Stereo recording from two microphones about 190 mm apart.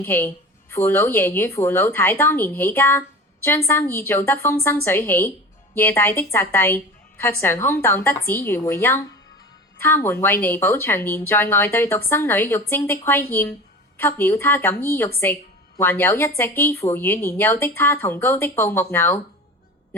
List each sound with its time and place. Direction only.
0.0 s speech: 10° left (ahead or behind)